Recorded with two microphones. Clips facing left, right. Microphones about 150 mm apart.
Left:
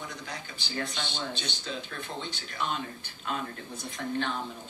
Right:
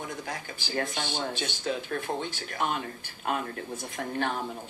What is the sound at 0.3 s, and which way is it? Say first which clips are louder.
Speech: right 4 dB; 50° right (ahead or behind).